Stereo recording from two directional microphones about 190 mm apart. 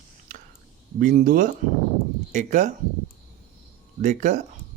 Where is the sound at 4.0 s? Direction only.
40° right (ahead or behind).